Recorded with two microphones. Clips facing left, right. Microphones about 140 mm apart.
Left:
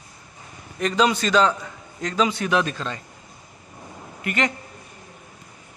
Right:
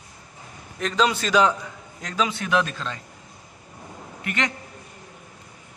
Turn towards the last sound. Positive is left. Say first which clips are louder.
# left 3 dB
turn(degrees=5)  # may be behind; listen again after turning